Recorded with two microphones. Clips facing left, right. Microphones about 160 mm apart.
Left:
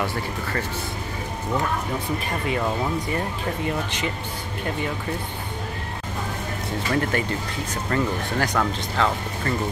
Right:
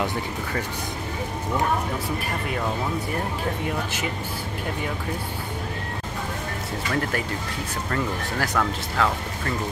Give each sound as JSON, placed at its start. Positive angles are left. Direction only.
{"t": 6.9, "sound": "speech", "side_deg": 0}